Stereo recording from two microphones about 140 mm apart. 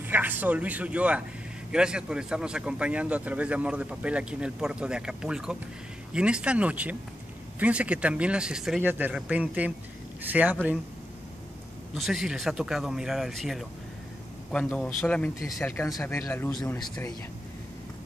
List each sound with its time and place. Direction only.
0.0 s a man's voice: 15° right (ahead or behind)
11.9 s speech: centre (ahead or behind); by 16.5 s 15° left (ahead or behind)